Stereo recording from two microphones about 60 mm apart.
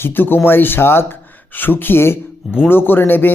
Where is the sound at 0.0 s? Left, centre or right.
Left.